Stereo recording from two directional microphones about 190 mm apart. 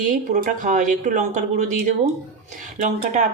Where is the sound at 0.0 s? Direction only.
45° right (ahead or behind).